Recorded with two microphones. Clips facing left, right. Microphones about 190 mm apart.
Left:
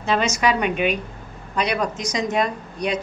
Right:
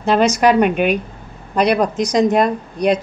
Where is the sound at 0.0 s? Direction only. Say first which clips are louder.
Right 7 dB; 60° right (ahead or behind).